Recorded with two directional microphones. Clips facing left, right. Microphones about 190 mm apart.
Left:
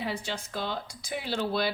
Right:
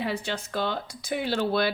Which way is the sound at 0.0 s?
65° right (ahead or behind).